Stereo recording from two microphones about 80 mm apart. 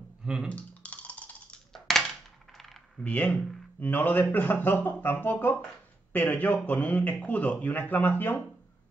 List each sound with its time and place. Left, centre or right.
0.2 s typing: centre
0.5 s computer keyboard: centre
1.7 s coin: centre
3.0 s speech: centre